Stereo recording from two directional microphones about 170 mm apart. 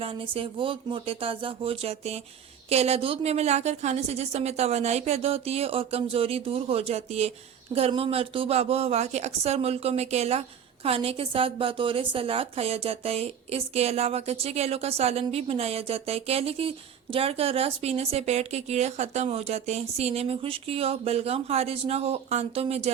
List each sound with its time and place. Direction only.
0.0 s a woman's voice: 35° right (ahead or behind)